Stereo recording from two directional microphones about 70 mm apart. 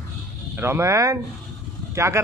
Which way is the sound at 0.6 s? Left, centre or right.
Right.